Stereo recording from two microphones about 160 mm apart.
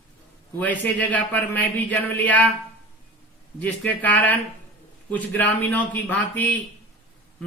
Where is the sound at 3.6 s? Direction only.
10° left (ahead or behind).